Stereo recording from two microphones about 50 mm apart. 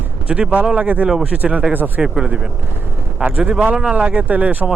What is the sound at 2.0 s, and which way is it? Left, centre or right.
Speech, centre.